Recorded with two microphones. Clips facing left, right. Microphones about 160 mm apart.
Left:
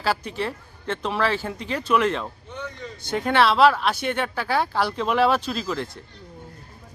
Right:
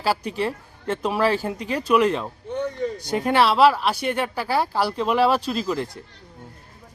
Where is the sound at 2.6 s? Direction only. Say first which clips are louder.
Right 10 dB; 40° right (ahead or behind).